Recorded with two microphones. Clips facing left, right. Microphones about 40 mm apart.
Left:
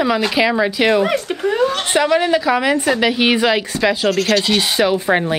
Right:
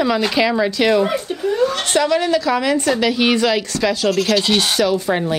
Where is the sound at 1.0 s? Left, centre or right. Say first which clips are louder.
Left 2 dB; left.